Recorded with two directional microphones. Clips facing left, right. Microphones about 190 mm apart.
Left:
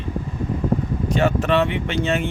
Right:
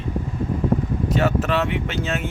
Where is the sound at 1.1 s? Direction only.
5° right (ahead or behind).